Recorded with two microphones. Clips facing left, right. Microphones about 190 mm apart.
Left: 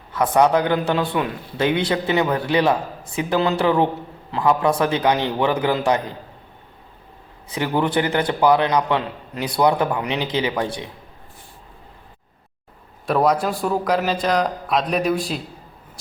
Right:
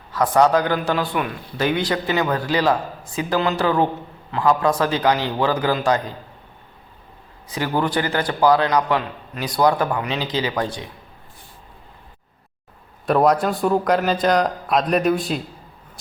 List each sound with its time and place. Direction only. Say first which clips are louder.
0.2 s a man's voice: even; 20° left (ahead or behind)
7.8 s a man's voice: left 2 dB; 20° left (ahead or behind)
13.1 s a man's voice: right 2 dB; centre (ahead or behind)